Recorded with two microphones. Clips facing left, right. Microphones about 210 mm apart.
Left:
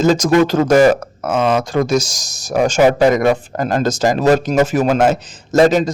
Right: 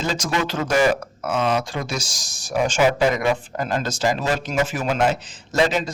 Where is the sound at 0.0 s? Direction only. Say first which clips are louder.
Left 12 dB; 45° left (ahead or behind).